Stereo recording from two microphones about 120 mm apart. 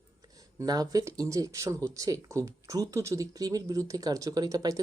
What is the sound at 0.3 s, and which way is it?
Speech, 30° right (ahead or behind).